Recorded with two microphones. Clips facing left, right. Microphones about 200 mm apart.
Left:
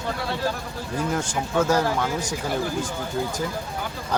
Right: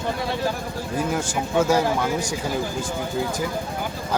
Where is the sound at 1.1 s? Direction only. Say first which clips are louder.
Right 1 dB; 10° right (ahead or behind).